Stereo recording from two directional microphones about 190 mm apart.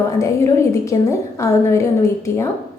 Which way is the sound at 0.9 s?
15° left (ahead or behind).